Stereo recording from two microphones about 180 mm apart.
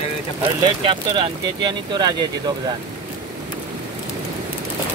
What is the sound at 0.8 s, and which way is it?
Speech, 25° right (ahead or behind).